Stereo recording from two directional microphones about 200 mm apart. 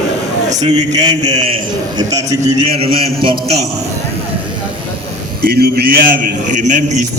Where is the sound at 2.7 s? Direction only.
30° right (ahead or behind).